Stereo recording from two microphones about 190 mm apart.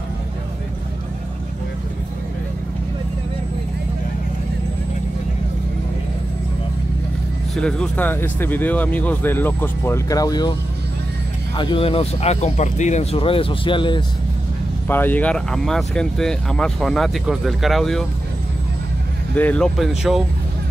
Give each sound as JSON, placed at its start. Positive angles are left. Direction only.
{"t": 7.5, "sound": "speech", "side_deg": 5}
{"t": 11.5, "sound": "speech", "side_deg": 25}
{"t": 14.9, "sound": "speech", "side_deg": 10}
{"t": 19.3, "sound": "speech", "side_deg": 5}